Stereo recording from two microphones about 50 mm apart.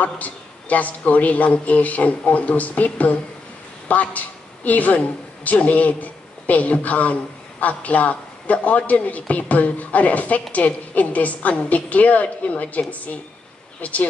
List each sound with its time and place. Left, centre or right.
0.0 s a woman's voice: left